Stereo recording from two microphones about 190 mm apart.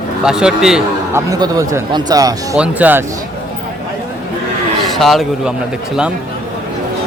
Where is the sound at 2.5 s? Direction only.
5° right (ahead or behind).